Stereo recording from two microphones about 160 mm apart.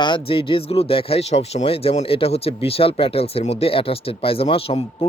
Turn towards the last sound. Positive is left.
turn(degrees=35)  # may be behind; listen again after turning